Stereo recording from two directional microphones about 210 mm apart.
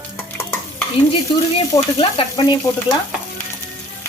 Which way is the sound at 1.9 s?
25° left (ahead or behind).